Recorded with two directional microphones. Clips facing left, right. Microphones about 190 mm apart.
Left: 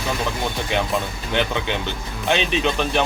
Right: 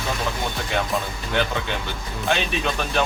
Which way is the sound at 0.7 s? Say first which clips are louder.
Left 1 dB; 20° left (ahead or behind).